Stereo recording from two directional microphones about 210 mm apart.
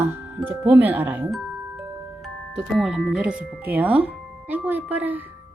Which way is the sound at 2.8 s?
Centre (ahead or behind).